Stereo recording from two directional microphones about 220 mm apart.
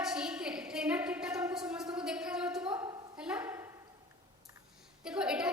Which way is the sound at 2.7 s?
15° right (ahead or behind).